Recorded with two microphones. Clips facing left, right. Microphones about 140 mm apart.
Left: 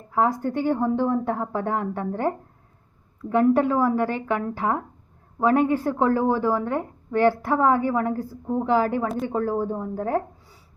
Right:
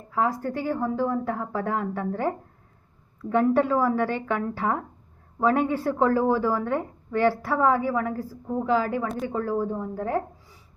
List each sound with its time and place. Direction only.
0.1 s a woman's voice: 25° left (ahead or behind)